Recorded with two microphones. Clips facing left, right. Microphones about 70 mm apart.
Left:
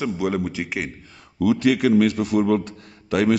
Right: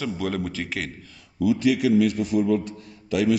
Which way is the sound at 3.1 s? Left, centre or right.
Left.